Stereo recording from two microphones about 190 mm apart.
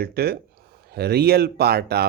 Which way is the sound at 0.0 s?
55° right (ahead or behind).